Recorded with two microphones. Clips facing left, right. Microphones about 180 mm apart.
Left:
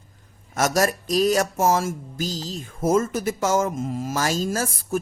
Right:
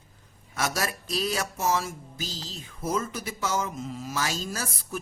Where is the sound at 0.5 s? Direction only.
45° left (ahead or behind).